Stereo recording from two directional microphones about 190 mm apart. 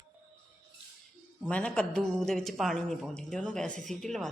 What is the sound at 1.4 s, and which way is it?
Speech, 5° left (ahead or behind).